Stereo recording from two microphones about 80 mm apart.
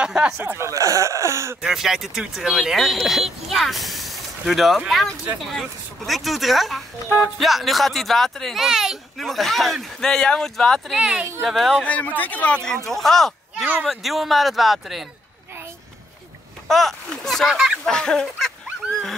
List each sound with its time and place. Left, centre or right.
0.0 s speech: centre
0.4 s speech: right
0.7 s speech: right
1.6 s speech: centre
10.9 s speech: centre
11.4 s speech: centre
11.8 s fowl: centre
12.2 s speech: centre
12.6 s speech: centre
16.6 s speech: centre
17.8 s fowl: centre